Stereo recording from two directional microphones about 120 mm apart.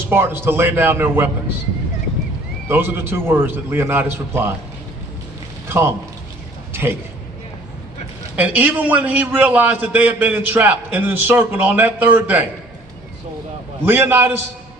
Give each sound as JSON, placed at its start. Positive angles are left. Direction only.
{"t": 0.1, "sound": "a man's voice", "side_deg": -20}
{"t": 2.6, "sound": "a man's voice", "side_deg": -20}
{"t": 5.6, "sound": "speech", "side_deg": -20}
{"t": 8.4, "sound": "a man's voice", "side_deg": -15}
{"t": 13.8, "sound": "a man's voice", "side_deg": -15}